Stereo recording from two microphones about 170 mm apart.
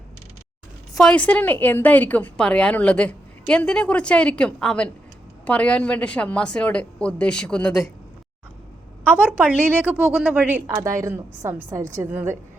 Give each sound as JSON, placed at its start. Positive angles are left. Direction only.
{"t": 0.9, "sound": "a woman's voice", "side_deg": 5}
{"t": 9.1, "sound": "a woman's voice", "side_deg": -5}